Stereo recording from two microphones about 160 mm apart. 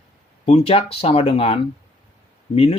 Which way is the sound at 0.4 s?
40° left (ahead or behind).